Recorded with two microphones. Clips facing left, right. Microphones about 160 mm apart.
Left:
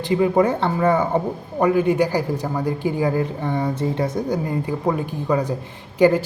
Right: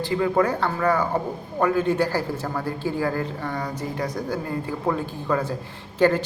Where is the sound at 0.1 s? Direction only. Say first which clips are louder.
Left 5 dB; 20° left (ahead or behind).